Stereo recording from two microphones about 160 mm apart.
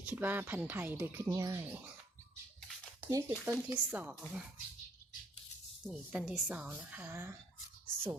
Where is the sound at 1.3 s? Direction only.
25° right (ahead or behind).